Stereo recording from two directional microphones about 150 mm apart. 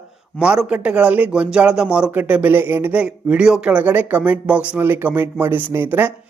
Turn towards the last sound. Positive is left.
turn(degrees=-10)  # may be behind; listen again after turning